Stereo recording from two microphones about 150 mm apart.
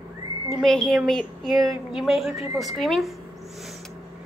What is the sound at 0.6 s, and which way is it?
A woman's voice, centre (ahead or behind).